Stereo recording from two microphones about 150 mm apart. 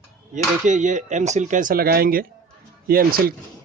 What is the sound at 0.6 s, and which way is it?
A man's voice, 55° right (ahead or behind).